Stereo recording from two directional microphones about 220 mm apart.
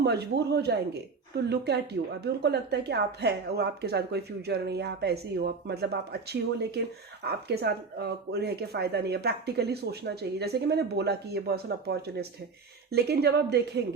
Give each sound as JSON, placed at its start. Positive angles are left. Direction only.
{"t": 0.0, "sound": "speech", "side_deg": -50}